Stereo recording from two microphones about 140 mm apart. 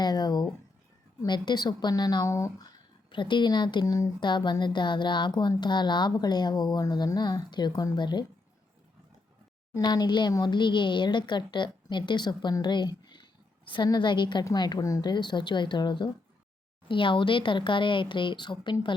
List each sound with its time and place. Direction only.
0.0 s speech: 30° left (ahead or behind)
9.7 s speech: 30° left (ahead or behind)